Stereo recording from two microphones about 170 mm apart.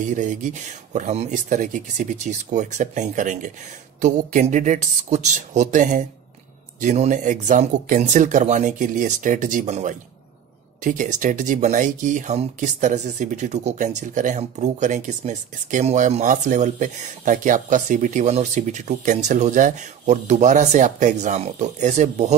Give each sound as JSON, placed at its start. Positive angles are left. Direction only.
{"t": 0.0, "sound": "speech", "side_deg": -45}